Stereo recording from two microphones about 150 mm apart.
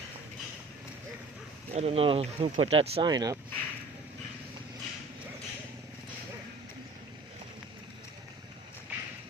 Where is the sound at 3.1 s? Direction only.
25° right (ahead or behind).